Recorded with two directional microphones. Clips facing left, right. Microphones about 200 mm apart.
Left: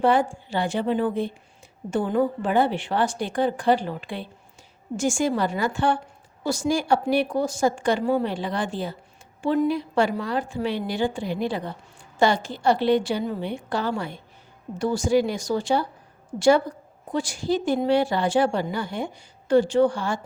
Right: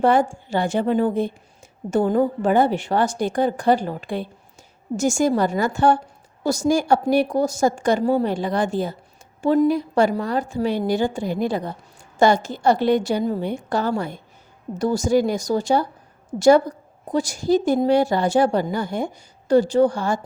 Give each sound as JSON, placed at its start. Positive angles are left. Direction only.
{"t": 0.0, "sound": "a woman's voice", "side_deg": -45}